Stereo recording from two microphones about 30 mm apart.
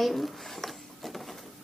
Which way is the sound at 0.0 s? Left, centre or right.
Centre.